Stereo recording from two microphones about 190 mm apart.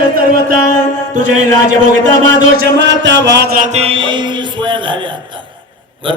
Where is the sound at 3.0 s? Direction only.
65° right (ahead or behind).